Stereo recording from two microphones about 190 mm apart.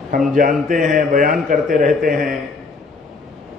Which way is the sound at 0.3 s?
45° right (ahead or behind).